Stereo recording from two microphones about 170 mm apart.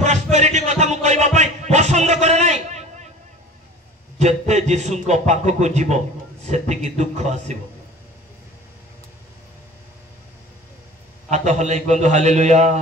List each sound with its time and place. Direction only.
0.0 s music: 40° right (ahead or behind)
4.2 s speech: 40° right (ahead or behind)
11.2 s speech: 45° right (ahead or behind)